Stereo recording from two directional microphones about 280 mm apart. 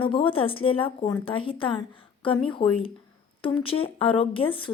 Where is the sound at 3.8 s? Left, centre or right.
Centre.